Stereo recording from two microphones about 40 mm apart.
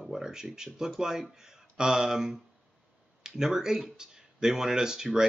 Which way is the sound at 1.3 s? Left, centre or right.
Centre.